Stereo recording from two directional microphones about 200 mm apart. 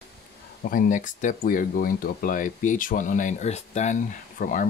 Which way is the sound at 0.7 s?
40° left (ahead or behind).